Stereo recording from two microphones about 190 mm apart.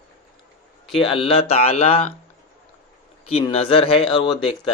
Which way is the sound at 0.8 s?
Centre (ahead or behind).